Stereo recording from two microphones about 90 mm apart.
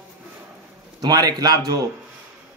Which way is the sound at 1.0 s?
45° right (ahead or behind).